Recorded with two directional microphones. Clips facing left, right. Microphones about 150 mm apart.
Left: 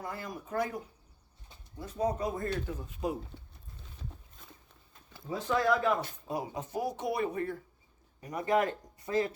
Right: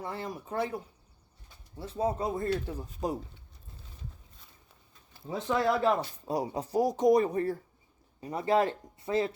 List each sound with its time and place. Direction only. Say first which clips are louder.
0.0 s speech: right 3 dB; 30° right (ahead or behind)
1.8 s speech: right 1 dB; 25° right (ahead or behind)
5.5 s speech: right 1 dB; 30° right (ahead or behind)